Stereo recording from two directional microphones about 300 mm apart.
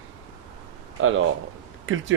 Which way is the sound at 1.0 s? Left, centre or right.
Right.